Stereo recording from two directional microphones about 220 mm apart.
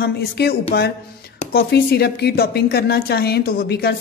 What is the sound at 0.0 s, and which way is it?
A man's voice, 45° left (ahead or behind).